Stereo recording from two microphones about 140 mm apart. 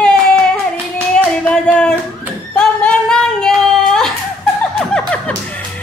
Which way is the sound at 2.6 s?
5° left (ahead or behind).